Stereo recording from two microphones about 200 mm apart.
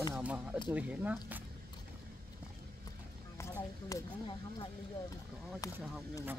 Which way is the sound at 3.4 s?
15° left (ahead or behind).